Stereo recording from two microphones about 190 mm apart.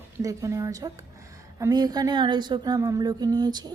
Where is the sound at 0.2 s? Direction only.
15° right (ahead or behind).